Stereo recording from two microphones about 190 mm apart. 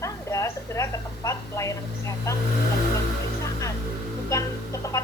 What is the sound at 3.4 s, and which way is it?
Music, 15° left (ahead or behind).